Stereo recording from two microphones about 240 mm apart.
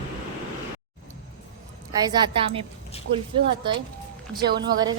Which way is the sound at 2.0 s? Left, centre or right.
Centre.